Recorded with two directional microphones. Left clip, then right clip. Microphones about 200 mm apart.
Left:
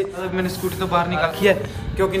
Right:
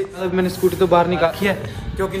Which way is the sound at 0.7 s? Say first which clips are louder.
Right 7 dB; 20° left (ahead or behind).